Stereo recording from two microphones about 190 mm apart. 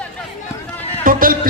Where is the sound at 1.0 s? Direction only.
50° right (ahead or behind).